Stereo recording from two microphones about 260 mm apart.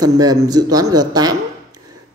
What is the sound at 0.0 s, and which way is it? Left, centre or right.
Speech, centre.